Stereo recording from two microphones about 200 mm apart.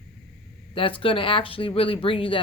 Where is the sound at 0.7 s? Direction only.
25° left (ahead or behind).